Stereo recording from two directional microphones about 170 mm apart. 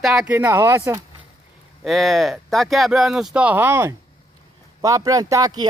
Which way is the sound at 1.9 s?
Centre (ahead or behind).